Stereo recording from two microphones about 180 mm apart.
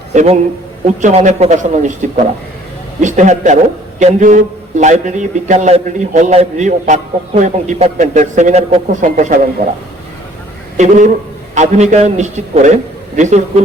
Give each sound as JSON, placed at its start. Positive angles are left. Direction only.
{"t": 0.1, "sound": "a man's voice", "side_deg": -40}
{"t": 10.8, "sound": "a man's voice", "side_deg": -40}